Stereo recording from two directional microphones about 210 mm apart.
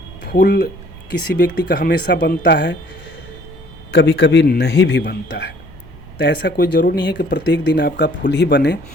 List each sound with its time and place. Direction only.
0.3 s speech: 50° left (ahead or behind)
3.9 s speech: 60° left (ahead or behind)